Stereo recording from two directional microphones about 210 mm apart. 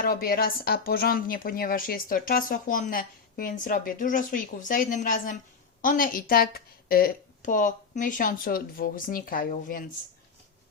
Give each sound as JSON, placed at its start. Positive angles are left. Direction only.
{"t": 0.0, "sound": "speech", "side_deg": 45}